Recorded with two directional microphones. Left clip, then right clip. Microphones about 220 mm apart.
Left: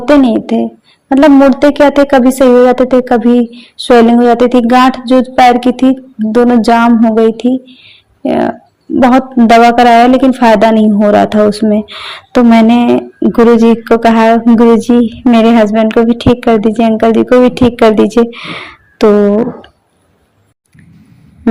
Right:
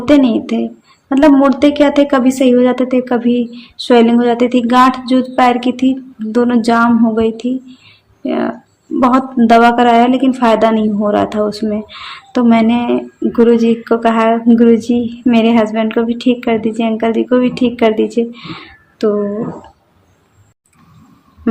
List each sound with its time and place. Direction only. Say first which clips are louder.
0.0 s speech: left 3 dB; 20° left (ahead or behind)